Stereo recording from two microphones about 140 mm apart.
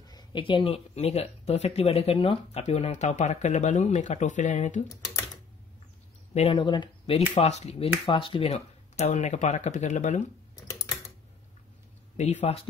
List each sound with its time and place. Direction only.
0.0 s speech: 30° left (ahead or behind); by 4.8 s 60° left (ahead or behind)
6.3 s speech: 40° left (ahead or behind)
7.2 s speech: 50° left (ahead or behind)
8.0 s speech: 35° left (ahead or behind); by 10.2 s 60° left (ahead or behind)
12.2 s speech: 55° left (ahead or behind)